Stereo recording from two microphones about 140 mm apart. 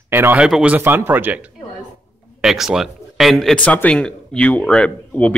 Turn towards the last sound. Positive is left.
turn(degrees=10)  # may be behind; listen again after turning